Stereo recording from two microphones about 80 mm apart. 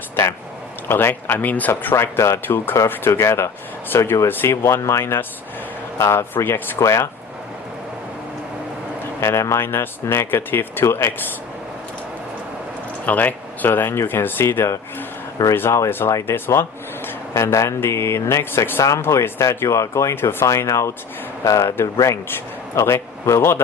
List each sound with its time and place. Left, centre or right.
0.9 s speech: left
9.2 s speech: left
13.1 s speech: left